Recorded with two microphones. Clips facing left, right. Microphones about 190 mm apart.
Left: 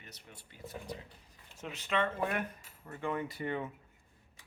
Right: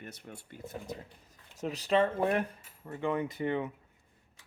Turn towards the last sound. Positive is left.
turn(degrees=-20)  # may be behind; listen again after turning